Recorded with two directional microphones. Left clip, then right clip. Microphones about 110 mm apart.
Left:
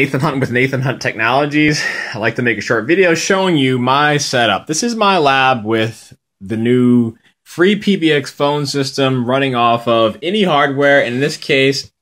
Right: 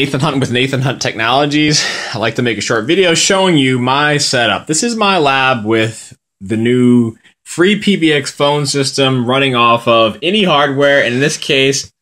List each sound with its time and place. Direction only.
0.2 s speech: 25° right (ahead or behind)
1.8 s speech: 5° right (ahead or behind)
2.9 s speech: 30° right (ahead or behind)
3.3 s speech: 5° left (ahead or behind)